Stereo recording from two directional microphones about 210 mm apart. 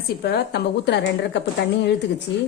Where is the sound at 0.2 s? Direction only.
50° left (ahead or behind).